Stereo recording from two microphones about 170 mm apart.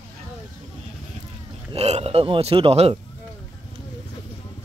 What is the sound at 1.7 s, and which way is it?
Speech, 35° right (ahead or behind).